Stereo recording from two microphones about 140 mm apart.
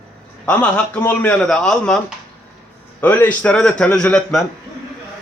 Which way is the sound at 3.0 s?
10° left (ahead or behind).